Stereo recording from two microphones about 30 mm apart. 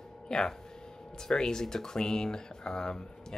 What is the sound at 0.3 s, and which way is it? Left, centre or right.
Speech, left.